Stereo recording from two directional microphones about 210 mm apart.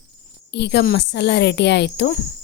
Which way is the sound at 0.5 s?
55° left (ahead or behind).